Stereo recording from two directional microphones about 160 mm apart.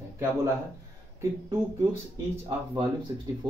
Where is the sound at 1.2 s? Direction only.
20° right (ahead or behind).